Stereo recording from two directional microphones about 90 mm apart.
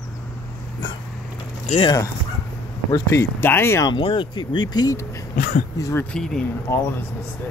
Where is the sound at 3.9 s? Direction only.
70° left (ahead or behind).